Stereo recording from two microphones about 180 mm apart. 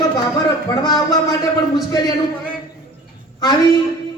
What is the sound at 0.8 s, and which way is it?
Speech, 20° left (ahead or behind).